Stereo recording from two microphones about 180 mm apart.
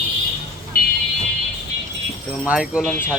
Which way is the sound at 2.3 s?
5° right (ahead or behind).